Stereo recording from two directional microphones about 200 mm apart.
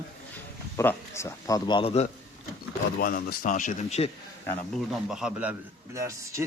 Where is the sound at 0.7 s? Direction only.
10° left (ahead or behind); by 2.1 s 30° left (ahead or behind).